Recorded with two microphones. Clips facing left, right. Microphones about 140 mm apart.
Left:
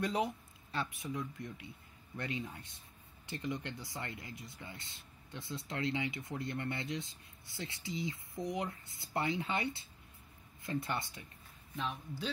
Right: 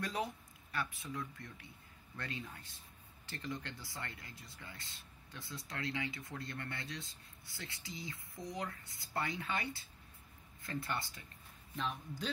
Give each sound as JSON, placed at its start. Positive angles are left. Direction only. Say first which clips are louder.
{"t": 0.0, "sound": "speech", "louder": "left 5 dB", "side_deg": 20}
{"t": 11.7, "sound": "a man's voice", "louder": "left 1 dB", "side_deg": 5}